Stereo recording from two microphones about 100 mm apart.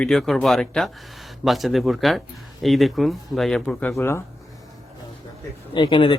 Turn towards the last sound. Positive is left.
turn(degrees=55)  # may be behind; listen again after turning